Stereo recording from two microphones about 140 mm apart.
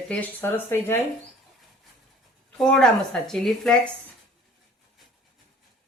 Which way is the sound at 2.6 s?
5° left (ahead or behind).